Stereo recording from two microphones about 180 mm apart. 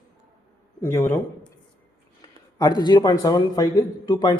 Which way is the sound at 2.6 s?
20° left (ahead or behind).